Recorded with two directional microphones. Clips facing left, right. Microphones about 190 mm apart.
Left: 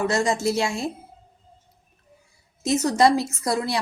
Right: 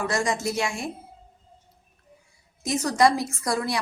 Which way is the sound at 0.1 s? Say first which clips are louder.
Left 4 dB; 25° left (ahead or behind).